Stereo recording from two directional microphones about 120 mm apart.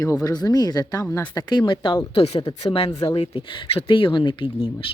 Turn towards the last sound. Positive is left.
turn(degrees=40)  # may be behind; listen again after turning